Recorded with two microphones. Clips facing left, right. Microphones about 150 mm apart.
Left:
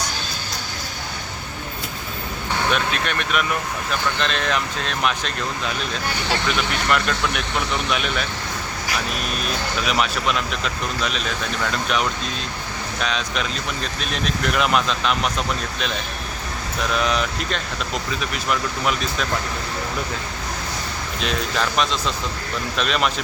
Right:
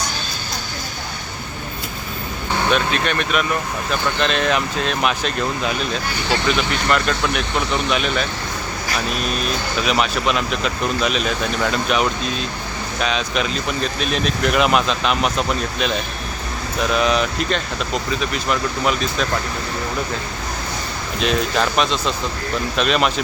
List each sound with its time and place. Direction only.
2.7 s speech: centre (ahead or behind)
6.9 s speech: centre (ahead or behind)
9.8 s speech: centre (ahead or behind)
16.9 s speech: centre (ahead or behind)
21.2 s speech: 5° right (ahead or behind)